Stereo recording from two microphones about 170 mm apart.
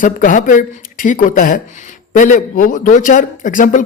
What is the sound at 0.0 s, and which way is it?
A man's voice, 50° left (ahead or behind).